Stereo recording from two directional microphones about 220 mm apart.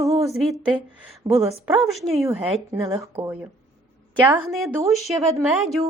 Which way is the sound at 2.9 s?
15° right (ahead or behind).